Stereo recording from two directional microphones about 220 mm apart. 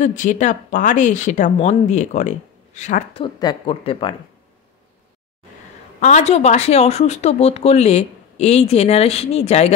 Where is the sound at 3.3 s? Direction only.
20° left (ahead or behind).